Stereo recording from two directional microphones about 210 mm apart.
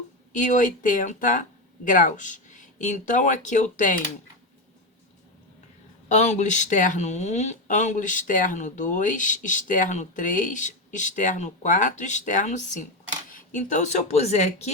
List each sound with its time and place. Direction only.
0.3 s speech: 35° left (ahead or behind)
6.1 s speech: 35° left (ahead or behind)